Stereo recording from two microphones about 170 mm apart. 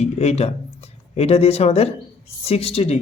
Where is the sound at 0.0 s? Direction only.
40° left (ahead or behind).